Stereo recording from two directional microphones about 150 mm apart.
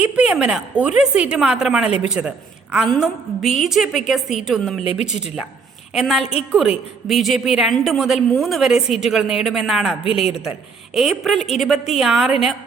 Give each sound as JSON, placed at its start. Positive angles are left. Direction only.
{"t": 0.0, "sound": "a woman's voice", "side_deg": -5}
{"t": 4.8, "sound": "a woman's voice", "side_deg": 45}
{"t": 5.9, "sound": "a woman's voice", "side_deg": -5}
{"t": 10.0, "sound": "a woman's voice", "side_deg": 40}
{"t": 10.9, "sound": "a woman's voice", "side_deg": -5}